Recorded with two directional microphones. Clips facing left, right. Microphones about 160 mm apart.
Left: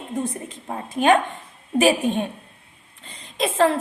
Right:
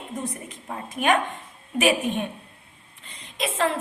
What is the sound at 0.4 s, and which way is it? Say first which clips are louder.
A woman's voice: left 3 dB; 30° left (ahead or behind).